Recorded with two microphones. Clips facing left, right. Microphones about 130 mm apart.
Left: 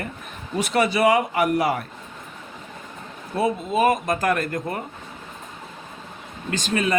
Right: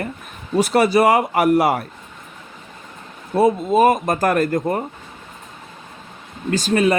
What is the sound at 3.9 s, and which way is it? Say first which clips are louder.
Speech: right 4 dB; 50° right (ahead or behind).